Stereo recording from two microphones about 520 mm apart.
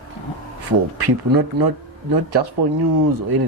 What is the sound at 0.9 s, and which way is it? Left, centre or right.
Speech, right.